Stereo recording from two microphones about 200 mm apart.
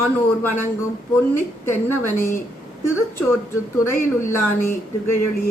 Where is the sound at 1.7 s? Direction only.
10° left (ahead or behind).